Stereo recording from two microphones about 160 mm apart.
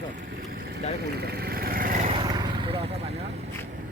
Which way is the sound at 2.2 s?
30° right (ahead or behind).